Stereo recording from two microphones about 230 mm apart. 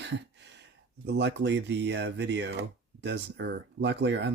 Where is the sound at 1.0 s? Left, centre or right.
Right.